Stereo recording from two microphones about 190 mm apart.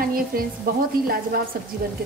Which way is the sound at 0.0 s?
50° right (ahead or behind).